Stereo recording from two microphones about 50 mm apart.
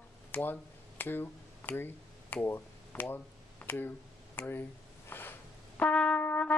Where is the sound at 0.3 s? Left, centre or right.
Left.